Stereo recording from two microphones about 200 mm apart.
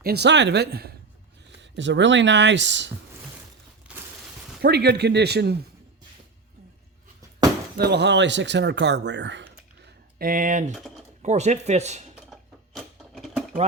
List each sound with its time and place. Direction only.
0.0 s speech: 55° right (ahead or behind)
1.5 s speech: 65° right (ahead or behind)
3.9 s a sound: 5° right (ahead or behind)
4.6 s speech: 55° right (ahead or behind)
7.8 s speech: 55° right (ahead or behind)
10.2 s speech: 45° right (ahead or behind)
10.8 s speech: centre (ahead or behind)
11.2 s speech: 35° right (ahead or behind)
12.3 s a sound: centre (ahead or behind)